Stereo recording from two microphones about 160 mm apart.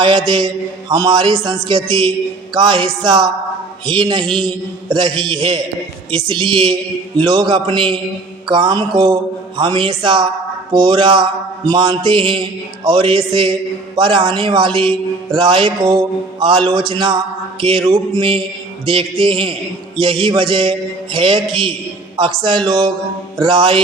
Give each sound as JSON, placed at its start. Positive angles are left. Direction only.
{"t": 0.3, "sound": "a man's voice", "side_deg": -25}
{"t": 6.1, "sound": "mantra", "side_deg": -30}
{"t": 8.4, "sound": "a man's voice", "side_deg": -30}
{"t": 9.6, "sound": "mantra", "side_deg": -30}
{"t": 22.1, "sound": "a man's voice", "side_deg": -30}
{"t": 23.4, "sound": "mantra", "side_deg": -30}